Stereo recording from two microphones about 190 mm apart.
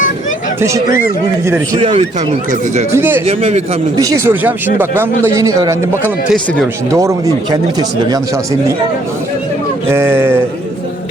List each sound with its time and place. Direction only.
1.5 s speech: 15° right (ahead or behind)
1.8 s speech: 30° right (ahead or behind)
2.9 s speech: 10° right (ahead or behind)
3.2 s a man's voice: 30° right (ahead or behind)
3.9 s speech: 20° right (ahead or behind)
6.2 s speech: 5° left (ahead or behind)
6.9 s speech: 15° right (ahead or behind)
9.9 s speech: 10° right (ahead or behind)